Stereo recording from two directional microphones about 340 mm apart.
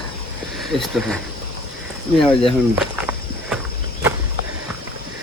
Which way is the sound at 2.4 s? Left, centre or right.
Centre.